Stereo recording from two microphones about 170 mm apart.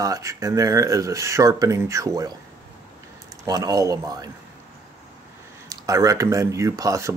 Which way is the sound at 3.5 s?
20° right (ahead or behind).